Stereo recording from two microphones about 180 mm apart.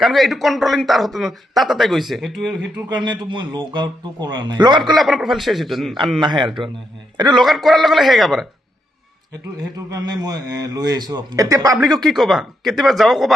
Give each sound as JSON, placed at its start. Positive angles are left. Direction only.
{"t": 0.0, "sound": "speech", "side_deg": 0}
{"t": 2.9, "sound": "a man's voice", "side_deg": -25}
{"t": 4.8, "sound": "speech", "side_deg": 0}
{"t": 7.3, "sound": "speech", "side_deg": 0}
{"t": 9.7, "sound": "a man's voice", "side_deg": -20}
{"t": 12.0, "sound": "speech", "side_deg": 0}